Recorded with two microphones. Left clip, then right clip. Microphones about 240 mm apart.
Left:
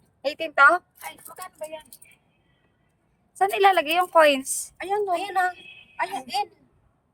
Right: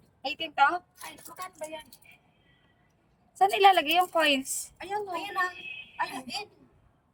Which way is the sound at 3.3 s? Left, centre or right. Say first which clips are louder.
Left 2 dB; centre.